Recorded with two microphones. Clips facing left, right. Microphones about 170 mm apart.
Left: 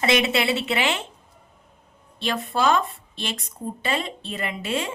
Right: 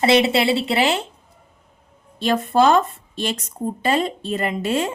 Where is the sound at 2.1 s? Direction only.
45° right (ahead or behind).